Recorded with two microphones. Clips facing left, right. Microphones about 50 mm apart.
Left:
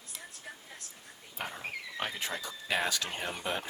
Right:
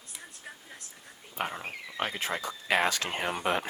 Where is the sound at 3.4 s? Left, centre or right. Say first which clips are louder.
Right 7 dB; right.